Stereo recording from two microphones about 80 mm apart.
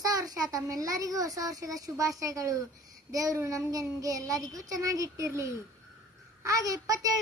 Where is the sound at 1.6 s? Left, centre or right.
Right.